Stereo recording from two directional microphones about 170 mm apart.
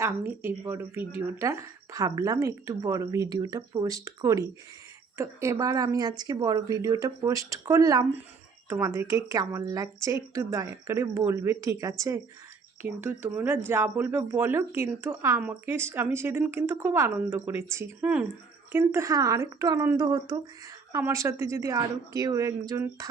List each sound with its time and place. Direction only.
0.0 s speech: 10° right (ahead or behind)